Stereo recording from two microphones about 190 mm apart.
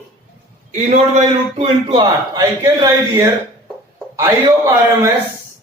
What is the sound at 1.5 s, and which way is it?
A man's voice, 25° right (ahead or behind).